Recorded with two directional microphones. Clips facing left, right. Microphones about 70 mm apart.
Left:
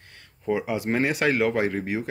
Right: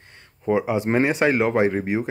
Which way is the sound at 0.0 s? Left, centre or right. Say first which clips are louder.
Right 4 dB; right.